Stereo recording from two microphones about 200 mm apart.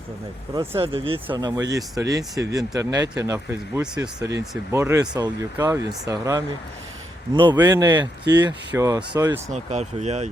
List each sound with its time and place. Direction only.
0.5 s speech: 10° right (ahead or behind)
0.8 s speech: 25° right (ahead or behind)
9.5 s speech: 35° right (ahead or behind)